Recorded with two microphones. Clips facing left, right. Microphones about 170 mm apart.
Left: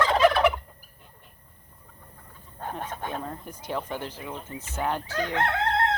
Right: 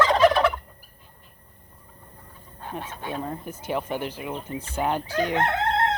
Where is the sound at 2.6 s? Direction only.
50° left (ahead or behind).